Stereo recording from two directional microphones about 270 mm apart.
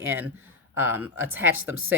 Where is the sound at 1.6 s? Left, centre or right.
Right.